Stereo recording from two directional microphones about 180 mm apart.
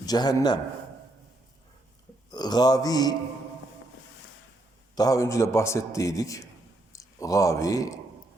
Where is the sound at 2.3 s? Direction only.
20° left (ahead or behind).